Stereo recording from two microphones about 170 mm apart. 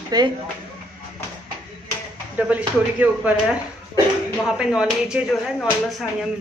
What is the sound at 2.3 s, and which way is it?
Speech, 10° right (ahead or behind).